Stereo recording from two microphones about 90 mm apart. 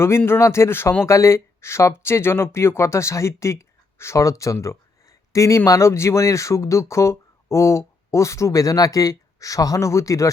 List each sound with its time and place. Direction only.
0.3 s speech: 30° left (ahead or behind)